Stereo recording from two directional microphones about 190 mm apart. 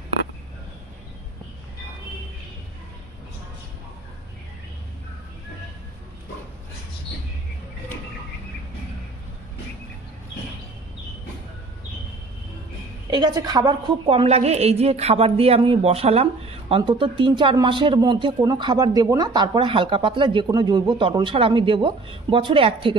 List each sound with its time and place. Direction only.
13.1 s a woman's voice: 20° right (ahead or behind)